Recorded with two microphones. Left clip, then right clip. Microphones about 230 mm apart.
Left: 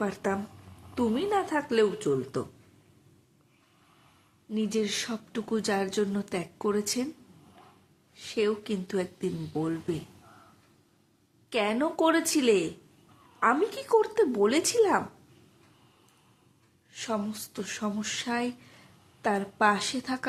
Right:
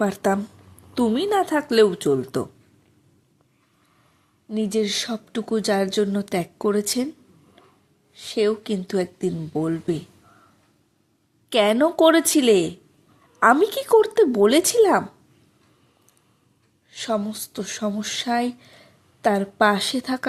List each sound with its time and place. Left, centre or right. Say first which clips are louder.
0.0 s speech: right 9 dB; right
4.5 s speech: right 7 dB; right
8.1 s speech: right 7 dB; right
11.4 s speech: right 10 dB; right
16.9 s speech: right 7 dB; right